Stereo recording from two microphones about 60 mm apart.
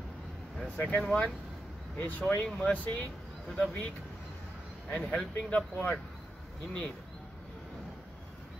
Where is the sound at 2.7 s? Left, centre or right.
Left.